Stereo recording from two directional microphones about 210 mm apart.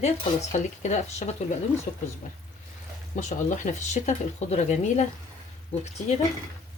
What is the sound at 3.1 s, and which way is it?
Speech, 35° left (ahead or behind).